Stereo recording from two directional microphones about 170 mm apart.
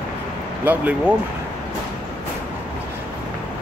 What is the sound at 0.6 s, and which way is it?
Speech, 10° right (ahead or behind).